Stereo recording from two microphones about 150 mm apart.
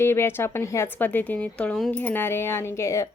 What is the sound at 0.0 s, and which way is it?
A woman's voice, 15° left (ahead or behind).